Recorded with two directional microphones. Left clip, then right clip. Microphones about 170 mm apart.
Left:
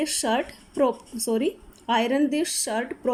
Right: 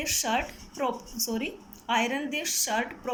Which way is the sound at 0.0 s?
35° left (ahead or behind).